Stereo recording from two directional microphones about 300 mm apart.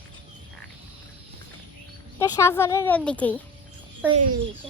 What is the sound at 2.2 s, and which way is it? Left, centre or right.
Speech, centre.